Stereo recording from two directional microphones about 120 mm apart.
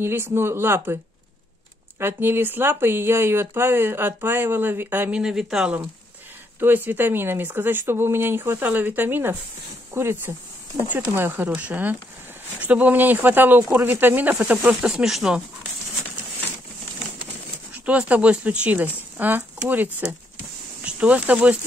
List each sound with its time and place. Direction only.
0.0 s speech: 20° right (ahead or behind)
2.0 s speech: 20° right (ahead or behind)
5.2 s speech: 5° right (ahead or behind)
6.6 s speech: 15° right (ahead or behind)
17.8 s speech: 10° right (ahead or behind)